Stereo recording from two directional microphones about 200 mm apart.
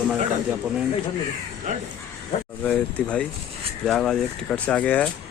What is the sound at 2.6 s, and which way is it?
Speech, 5° left (ahead or behind).